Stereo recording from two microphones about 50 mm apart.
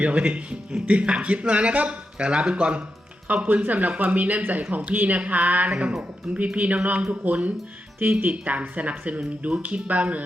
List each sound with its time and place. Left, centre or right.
0.0 s speech: right